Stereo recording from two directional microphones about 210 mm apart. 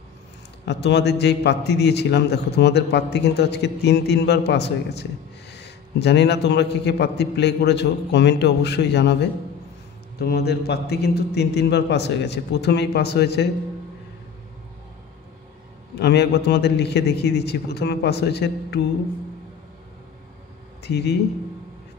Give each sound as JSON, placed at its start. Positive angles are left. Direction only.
{"t": 0.7, "sound": "a man's voice", "side_deg": 55}
{"t": 16.0, "sound": "a man's voice", "side_deg": 55}
{"t": 20.8, "sound": "a man's voice", "side_deg": 50}